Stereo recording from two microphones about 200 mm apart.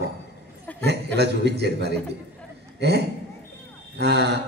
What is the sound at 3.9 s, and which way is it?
Speech, 55° right (ahead or behind).